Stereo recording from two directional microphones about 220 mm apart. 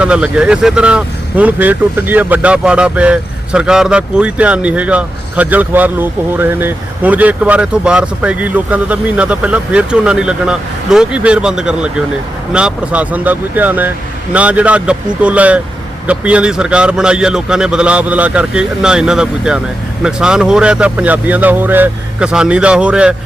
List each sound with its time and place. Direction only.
0.0 s speech: 5° right (ahead or behind)